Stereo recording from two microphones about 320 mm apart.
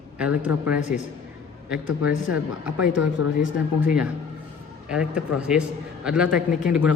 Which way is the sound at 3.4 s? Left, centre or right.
Left.